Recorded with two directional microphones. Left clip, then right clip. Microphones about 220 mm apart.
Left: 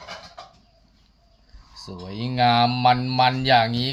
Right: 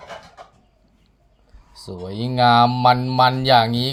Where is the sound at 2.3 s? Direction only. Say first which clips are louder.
Right 4 dB; 25° right (ahead or behind).